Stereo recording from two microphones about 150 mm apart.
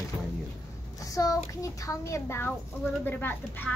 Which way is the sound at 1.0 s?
20° left (ahead or behind).